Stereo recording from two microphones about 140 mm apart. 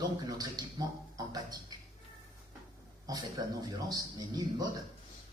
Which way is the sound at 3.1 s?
25° right (ahead or behind).